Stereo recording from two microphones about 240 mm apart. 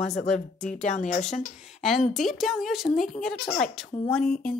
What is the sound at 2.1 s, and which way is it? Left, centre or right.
Speech, centre.